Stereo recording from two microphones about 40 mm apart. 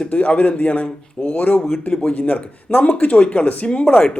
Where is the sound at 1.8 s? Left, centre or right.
Left.